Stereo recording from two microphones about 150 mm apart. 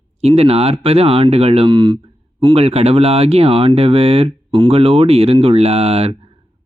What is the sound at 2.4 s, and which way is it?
Speech, 40° right (ahead or behind).